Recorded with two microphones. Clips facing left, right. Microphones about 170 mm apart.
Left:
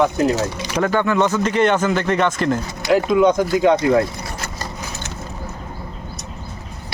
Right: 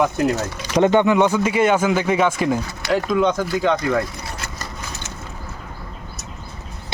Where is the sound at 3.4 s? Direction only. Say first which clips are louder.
Left 4 dB; 20° left (ahead or behind).